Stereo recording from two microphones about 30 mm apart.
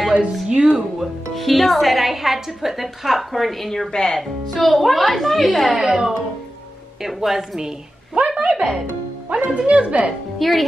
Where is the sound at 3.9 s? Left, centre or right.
Left.